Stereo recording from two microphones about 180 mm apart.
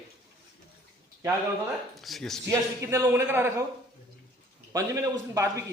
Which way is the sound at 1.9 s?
Centre (ahead or behind).